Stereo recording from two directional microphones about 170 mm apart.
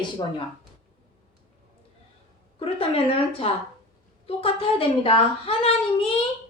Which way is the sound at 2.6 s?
35° left (ahead or behind).